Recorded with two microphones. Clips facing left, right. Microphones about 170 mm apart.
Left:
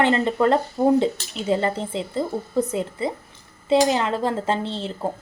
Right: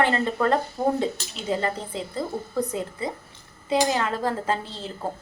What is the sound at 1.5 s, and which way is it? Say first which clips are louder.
A woman's voice: left 4 dB; 25° left (ahead or behind).